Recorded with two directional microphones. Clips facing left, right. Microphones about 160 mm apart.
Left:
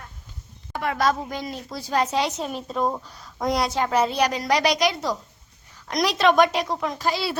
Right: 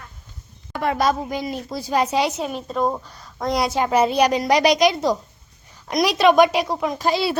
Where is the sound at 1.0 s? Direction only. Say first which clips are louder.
Even; 10° right (ahead or behind).